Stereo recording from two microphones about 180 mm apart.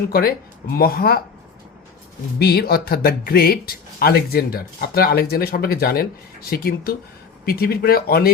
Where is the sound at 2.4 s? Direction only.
60° left (ahead or behind).